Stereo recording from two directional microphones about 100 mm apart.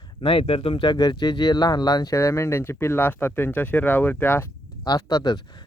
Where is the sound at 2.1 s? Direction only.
30° left (ahead or behind).